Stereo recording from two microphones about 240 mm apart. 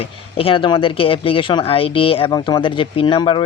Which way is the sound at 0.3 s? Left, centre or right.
Left.